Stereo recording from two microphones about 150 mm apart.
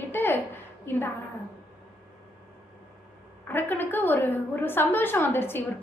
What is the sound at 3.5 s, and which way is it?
A woman's voice, 15° left (ahead or behind).